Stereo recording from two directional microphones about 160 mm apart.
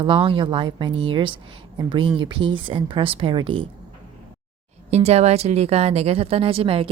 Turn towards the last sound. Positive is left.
turn(degrees=-35)  # may be behind; listen again after turning